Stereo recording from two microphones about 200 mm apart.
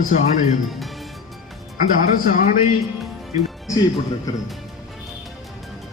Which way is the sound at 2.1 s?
40° left (ahead or behind).